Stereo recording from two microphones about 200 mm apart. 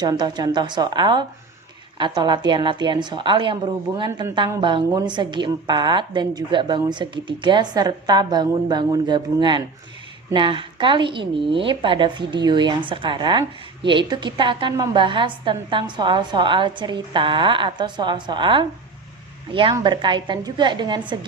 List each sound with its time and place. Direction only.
0.0 s a woman's voice: 20° right (ahead or behind)